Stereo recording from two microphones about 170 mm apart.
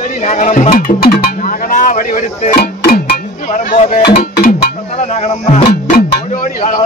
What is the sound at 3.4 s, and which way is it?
Speech, 45° left (ahead or behind).